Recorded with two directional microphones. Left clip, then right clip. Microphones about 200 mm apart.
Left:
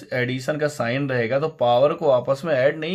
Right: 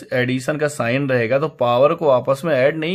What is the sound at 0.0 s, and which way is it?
Speech, 35° right (ahead or behind).